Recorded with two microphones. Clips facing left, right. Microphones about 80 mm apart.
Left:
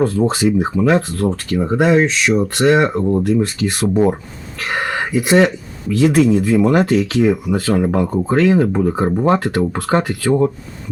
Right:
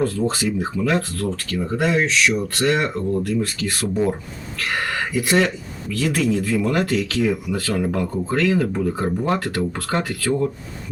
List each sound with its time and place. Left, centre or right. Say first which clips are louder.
0.0 s speech: left 6 dB; left